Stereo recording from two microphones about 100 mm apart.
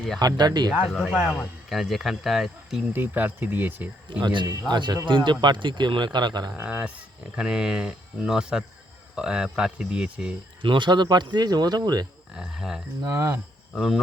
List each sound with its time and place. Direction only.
0.2 s speech: 45° right (ahead or behind)
0.7 s speech: centre (ahead or behind)
1.1 s speech: 10° right (ahead or behind)
2.9 s speech: 20° right (ahead or behind)
4.2 s speech: 55° right (ahead or behind)
6.6 s speech: 15° right (ahead or behind)
10.6 s speech: 55° right (ahead or behind)
12.3 s speech: 5° right (ahead or behind)
13.1 s speech: 30° right (ahead or behind)
13.7 s speech: centre (ahead or behind)